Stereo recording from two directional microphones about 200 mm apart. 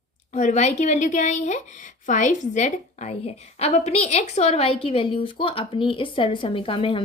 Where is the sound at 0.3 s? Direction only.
35° left (ahead or behind).